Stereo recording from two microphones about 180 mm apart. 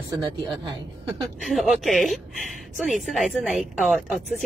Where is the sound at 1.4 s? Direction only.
Centre (ahead or behind).